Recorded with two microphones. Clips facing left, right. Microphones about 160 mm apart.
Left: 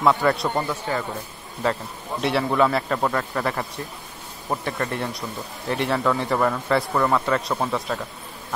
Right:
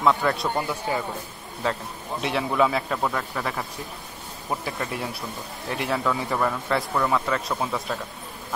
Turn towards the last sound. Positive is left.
turn(degrees=0)  # may be behind; listen again after turning